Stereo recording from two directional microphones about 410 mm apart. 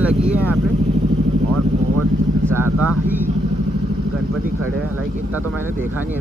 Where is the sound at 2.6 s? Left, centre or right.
Right.